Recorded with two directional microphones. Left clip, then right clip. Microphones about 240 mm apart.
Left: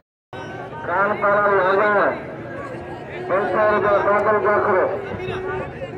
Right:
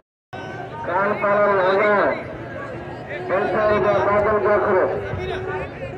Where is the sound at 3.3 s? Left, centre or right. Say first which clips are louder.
Left 1 dB; left.